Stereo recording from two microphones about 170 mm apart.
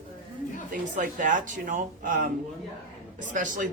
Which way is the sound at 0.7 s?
50° right (ahead or behind).